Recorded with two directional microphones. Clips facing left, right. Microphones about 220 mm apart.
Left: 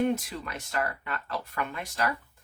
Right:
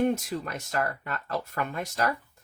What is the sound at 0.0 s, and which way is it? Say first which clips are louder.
Speech: right 2 dB; 45° right (ahead or behind).